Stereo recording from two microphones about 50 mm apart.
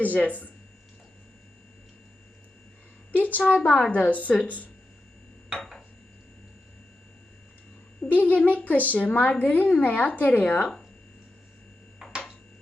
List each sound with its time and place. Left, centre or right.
0.0 s a woman's voice: left
3.2 s a woman's voice: left
8.0 s a woman's voice: left